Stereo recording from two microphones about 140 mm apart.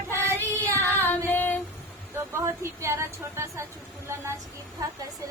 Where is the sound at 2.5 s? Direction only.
20° right (ahead or behind).